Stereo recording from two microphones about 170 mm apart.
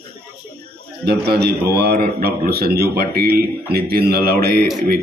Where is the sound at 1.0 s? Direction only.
70° right (ahead or behind).